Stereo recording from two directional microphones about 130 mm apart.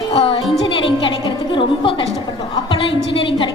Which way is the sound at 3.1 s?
40° left (ahead or behind).